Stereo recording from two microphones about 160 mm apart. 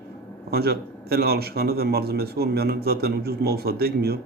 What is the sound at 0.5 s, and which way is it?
A man's voice, 80° right.